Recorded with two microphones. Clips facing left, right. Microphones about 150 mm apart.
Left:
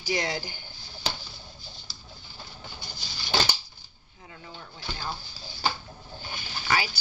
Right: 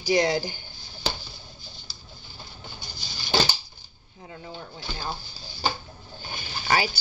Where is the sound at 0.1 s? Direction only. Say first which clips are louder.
Right 7 dB; 35° right (ahead or behind).